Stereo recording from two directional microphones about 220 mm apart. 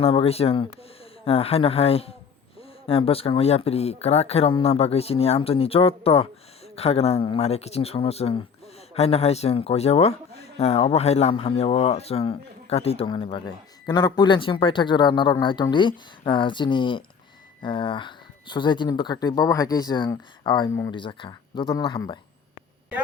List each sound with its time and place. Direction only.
0.0 s speech: 25° left (ahead or behind)